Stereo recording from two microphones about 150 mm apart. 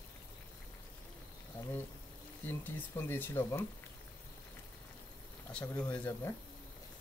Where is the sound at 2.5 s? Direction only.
15° left (ahead or behind).